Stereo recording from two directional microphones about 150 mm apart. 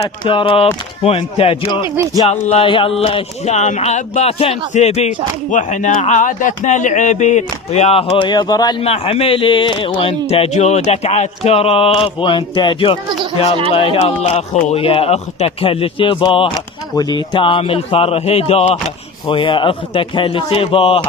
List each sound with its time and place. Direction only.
0.0 s speech: 35° left (ahead or behind)
1.7 s speech: 30° left (ahead or behind)
8.8 s speech: 40° left (ahead or behind)